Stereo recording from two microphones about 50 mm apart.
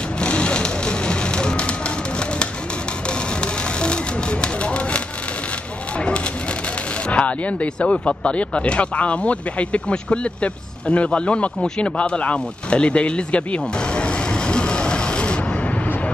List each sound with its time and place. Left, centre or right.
0.2 s music: left
3.8 s a sound: centre
7.1 s speech: left